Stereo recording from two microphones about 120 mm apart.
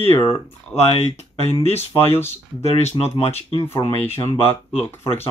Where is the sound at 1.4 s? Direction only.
60° left (ahead or behind).